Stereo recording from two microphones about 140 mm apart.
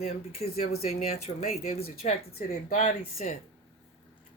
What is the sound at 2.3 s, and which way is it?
Speech, 70° left (ahead or behind).